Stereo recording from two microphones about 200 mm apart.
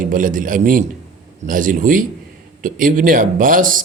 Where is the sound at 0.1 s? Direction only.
40° right (ahead or behind).